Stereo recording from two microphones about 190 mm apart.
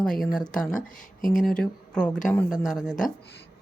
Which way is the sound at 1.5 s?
5° left (ahead or behind).